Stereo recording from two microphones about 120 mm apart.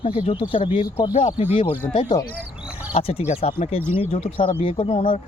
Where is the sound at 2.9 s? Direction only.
55° left (ahead or behind).